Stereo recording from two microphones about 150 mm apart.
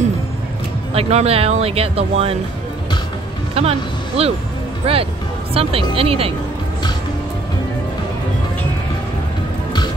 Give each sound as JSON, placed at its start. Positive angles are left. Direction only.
{"t": 0.9, "sound": "speech", "side_deg": -40}
{"t": 3.6, "sound": "speech", "side_deg": -40}